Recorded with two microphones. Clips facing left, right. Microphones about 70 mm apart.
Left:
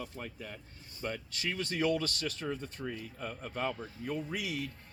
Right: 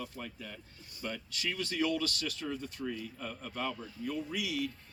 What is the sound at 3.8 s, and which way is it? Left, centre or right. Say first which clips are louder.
Speech: even; left.